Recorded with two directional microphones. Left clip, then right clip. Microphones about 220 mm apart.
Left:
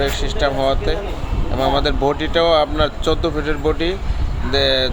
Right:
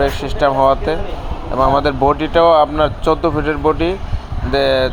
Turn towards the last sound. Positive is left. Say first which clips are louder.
# right 3 dB
turn(degrees=-5)  # may be behind; listen again after turning